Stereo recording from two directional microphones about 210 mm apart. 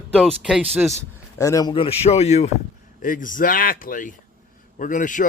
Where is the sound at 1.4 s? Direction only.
15° left (ahead or behind).